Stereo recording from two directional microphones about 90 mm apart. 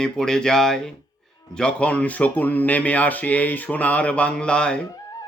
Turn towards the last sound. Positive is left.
turn(degrees=10)  # may be behind; listen again after turning